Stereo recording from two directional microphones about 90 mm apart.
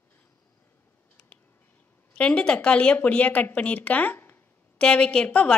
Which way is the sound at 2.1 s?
10° left (ahead or behind).